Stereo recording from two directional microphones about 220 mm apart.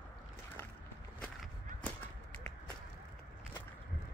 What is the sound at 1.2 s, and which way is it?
Whip, 5° left (ahead or behind).